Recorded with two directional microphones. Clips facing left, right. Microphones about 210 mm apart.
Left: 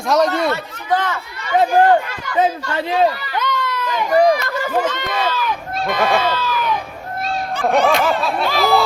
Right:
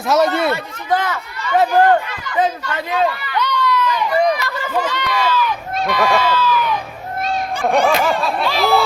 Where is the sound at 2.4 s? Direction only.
30° left (ahead or behind).